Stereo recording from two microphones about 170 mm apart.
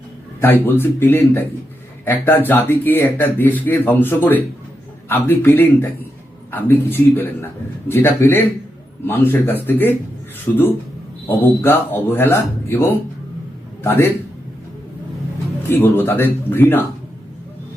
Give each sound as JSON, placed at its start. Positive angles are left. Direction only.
{"t": 0.4, "sound": "speech", "side_deg": 10}
{"t": 15.7, "sound": "speech", "side_deg": 10}